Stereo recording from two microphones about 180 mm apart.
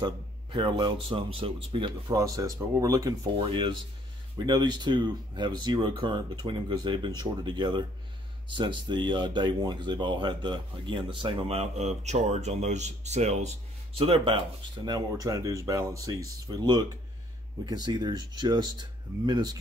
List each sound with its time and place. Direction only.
0.0 s speech: 25° right (ahead or behind)